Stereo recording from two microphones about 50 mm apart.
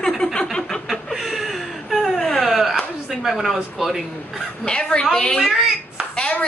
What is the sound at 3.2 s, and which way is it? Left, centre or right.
Speech, centre.